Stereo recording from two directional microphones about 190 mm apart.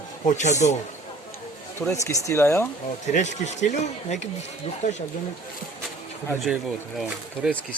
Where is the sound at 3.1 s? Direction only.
40° left (ahead or behind).